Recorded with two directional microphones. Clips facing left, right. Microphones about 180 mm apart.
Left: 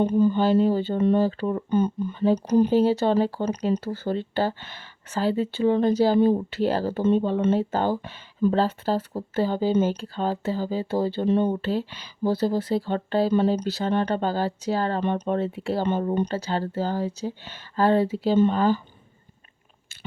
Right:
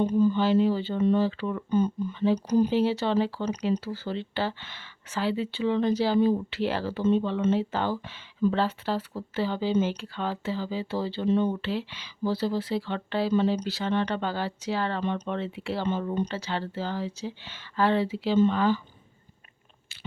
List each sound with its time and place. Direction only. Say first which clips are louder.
0.0 s speech: left 3 dB; 55° left (ahead or behind); by 1.6 s 40° left (ahead or behind)
1.7 s speech: even; 55° left (ahead or behind)